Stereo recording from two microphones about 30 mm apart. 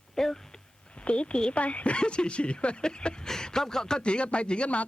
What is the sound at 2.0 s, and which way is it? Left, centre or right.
Speech, left.